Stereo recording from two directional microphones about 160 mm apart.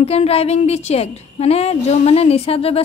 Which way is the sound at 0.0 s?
40° left (ahead or behind).